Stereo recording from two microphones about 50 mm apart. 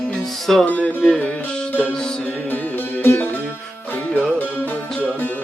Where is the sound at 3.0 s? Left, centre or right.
Left.